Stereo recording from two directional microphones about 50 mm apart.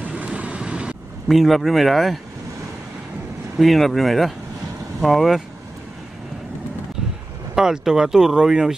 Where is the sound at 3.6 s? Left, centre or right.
Centre.